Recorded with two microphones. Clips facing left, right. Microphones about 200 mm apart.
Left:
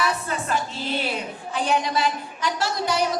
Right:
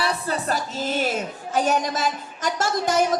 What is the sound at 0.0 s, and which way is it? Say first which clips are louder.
A woman's voice: right 1 dB; 35° right (ahead or behind).